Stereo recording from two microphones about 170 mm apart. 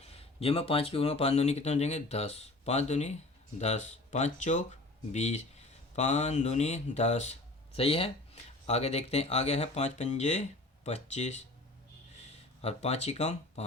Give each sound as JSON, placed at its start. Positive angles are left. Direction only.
{"t": 0.0, "sound": "speech", "side_deg": 35}
{"t": 12.6, "sound": "speech", "side_deg": 40}